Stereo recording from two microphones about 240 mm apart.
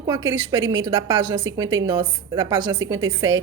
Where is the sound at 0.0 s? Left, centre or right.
Centre.